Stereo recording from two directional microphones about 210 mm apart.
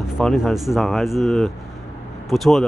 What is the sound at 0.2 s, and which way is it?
Speech, centre (ahead or behind).